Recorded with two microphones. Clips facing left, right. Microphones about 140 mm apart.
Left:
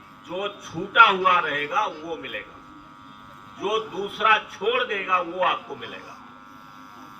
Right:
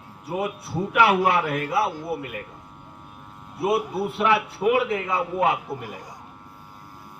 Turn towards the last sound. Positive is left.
turn(degrees=-30)  # may be behind; listen again after turning